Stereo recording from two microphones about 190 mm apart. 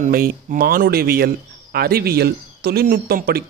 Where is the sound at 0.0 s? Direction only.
45° right (ahead or behind).